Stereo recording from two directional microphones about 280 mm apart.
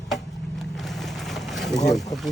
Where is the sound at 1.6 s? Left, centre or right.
Centre.